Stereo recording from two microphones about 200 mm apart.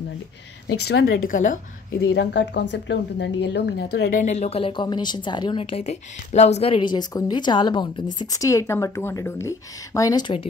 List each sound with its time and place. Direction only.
0.8 s speech: 50° left (ahead or behind)
2.0 s a woman's voice: 60° left (ahead or behind); by 10.5 s 25° left (ahead or behind)